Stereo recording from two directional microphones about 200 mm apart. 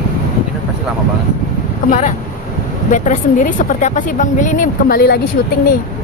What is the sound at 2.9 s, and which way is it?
Speech, 40° left (ahead or behind).